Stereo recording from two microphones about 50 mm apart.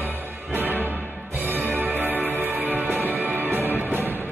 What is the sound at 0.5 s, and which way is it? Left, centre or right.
Music, right.